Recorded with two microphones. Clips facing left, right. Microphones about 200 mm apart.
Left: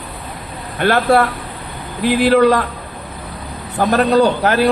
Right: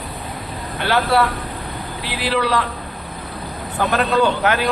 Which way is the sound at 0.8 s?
50° left (ahead or behind).